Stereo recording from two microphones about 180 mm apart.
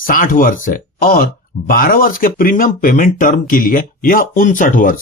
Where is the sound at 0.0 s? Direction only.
50° left (ahead or behind).